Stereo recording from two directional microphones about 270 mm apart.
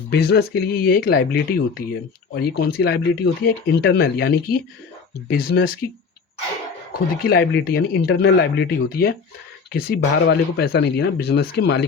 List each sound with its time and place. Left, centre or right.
0.1 s speech: left
7.2 s speech: left